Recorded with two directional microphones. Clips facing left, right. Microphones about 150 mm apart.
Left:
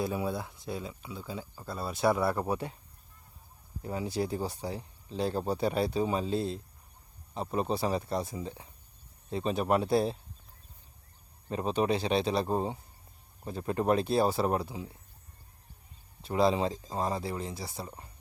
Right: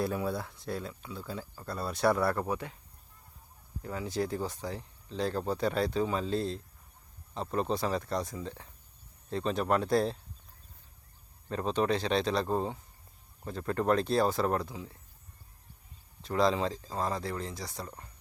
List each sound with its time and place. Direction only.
0.0 s speech: 5° left (ahead or behind)
2.2 s speech: 20° left (ahead or behind)
2.5 s speech: 35° left (ahead or behind)
3.8 s speech: 15° left (ahead or behind)
9.3 s speech: 10° left (ahead or behind)
11.4 s speech: 10° left (ahead or behind)
16.2 s speech: 10° left (ahead or behind)